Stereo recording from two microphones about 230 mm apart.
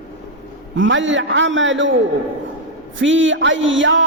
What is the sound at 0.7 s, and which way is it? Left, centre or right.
A man's voice, right.